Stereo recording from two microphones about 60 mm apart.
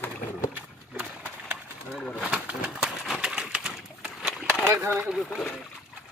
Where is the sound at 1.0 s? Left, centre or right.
Right.